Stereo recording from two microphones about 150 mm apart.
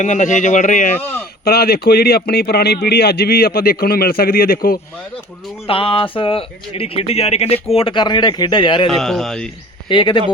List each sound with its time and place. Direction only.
0.0 s speech: 55° left (ahead or behind)
1.5 s a man's voice: 90° left
5.6 s speech: 35° left (ahead or behind)
8.9 s speech: 5° left (ahead or behind)
9.9 s speech: 30° left (ahead or behind)